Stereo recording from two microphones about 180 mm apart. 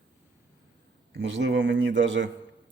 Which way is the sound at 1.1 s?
80° right.